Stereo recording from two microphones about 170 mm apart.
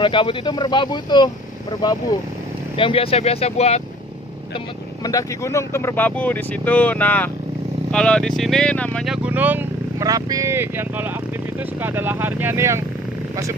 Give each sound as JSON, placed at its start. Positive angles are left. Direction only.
{"t": 0.0, "sound": "speech", "side_deg": 30}
{"t": 5.0, "sound": "speech", "side_deg": 20}